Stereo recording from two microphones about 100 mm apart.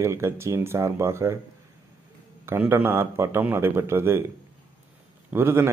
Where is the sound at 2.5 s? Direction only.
20° right (ahead or behind).